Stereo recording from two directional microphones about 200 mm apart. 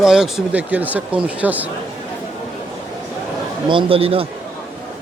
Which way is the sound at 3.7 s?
25° right (ahead or behind).